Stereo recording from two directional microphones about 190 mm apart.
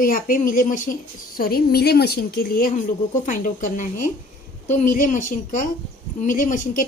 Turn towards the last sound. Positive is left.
turn(degrees=45)  # may be behind; listen again after turning